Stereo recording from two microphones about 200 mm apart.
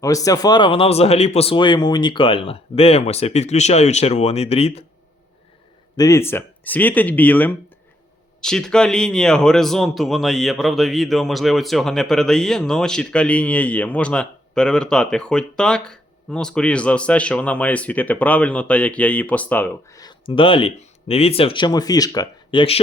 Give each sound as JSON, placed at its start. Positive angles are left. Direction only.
{"t": 0.0, "sound": "speech", "side_deg": 15}
{"t": 6.0, "sound": "speech", "side_deg": 15}